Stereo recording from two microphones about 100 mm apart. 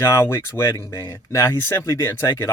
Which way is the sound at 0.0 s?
25° left (ahead or behind).